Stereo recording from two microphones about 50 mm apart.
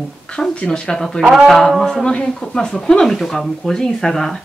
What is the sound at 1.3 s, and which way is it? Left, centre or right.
Speech, centre.